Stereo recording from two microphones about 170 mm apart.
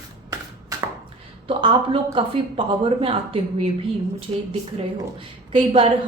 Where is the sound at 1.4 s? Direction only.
30° right (ahead or behind).